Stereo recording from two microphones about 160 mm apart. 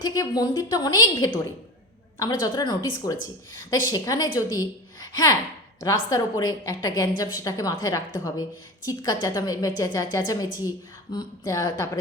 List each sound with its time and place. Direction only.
0.0 s a woman's voice: 25° left (ahead or behind)